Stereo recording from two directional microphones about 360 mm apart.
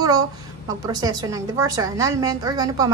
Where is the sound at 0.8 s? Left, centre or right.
Centre.